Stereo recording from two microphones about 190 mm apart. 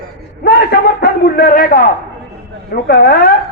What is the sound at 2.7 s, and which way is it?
Speech, 55° left (ahead or behind).